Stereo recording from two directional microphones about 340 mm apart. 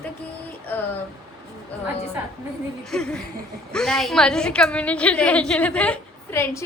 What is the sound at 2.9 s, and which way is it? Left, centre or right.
A woman's voice, centre.